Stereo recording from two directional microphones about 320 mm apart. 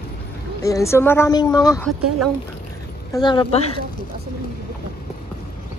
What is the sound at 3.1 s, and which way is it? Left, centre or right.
Speech, centre.